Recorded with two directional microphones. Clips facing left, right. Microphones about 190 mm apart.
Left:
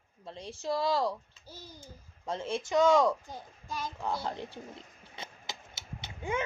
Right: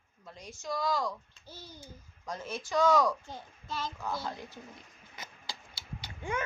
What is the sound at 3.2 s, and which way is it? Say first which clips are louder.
Speech: even; 10° left (ahead or behind).